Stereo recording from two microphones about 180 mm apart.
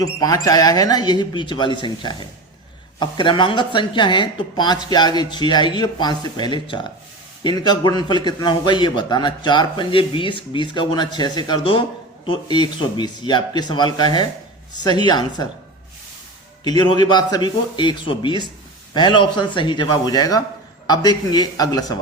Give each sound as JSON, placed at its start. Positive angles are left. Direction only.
{"t": 0.0, "sound": "a man's voice", "side_deg": 20}
{"t": 16.6, "sound": "a man's voice", "side_deg": 25}